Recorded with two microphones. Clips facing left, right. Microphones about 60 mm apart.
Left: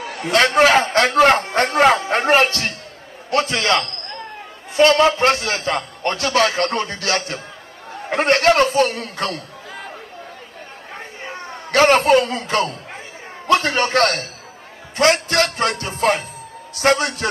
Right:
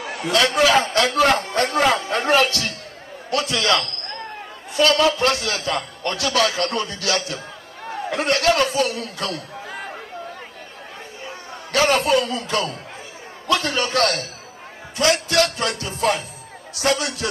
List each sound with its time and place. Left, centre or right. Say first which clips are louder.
0.2 s a man's voice: left 4 dB; left
11.2 s a man's voice: left 4 dB; left